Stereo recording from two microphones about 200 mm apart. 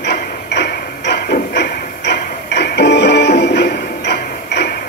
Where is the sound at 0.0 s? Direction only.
60° left (ahead or behind).